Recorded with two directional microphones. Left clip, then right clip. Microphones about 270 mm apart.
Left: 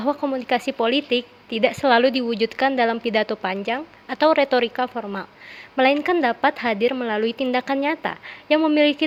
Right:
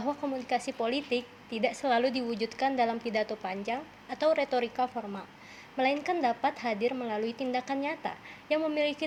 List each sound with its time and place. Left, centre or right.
0.0 s a woman's voice: left